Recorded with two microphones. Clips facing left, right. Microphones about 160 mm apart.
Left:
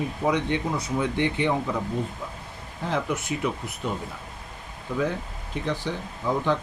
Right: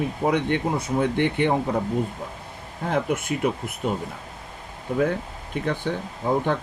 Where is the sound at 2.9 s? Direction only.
55° right (ahead or behind).